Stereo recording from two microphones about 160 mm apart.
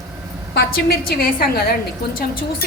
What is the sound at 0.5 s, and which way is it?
A woman's voice, 70° left (ahead or behind).